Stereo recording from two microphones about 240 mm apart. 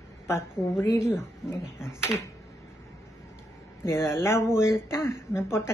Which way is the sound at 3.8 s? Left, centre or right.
Centre.